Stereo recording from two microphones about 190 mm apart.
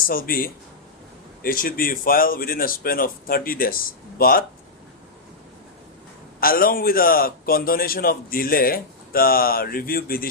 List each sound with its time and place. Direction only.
0.1 s a man's voice: 50° left (ahead or behind)
6.4 s a man's voice: 50° left (ahead or behind)